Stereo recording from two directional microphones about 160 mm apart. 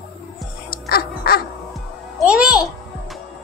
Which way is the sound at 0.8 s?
75° left (ahead or behind).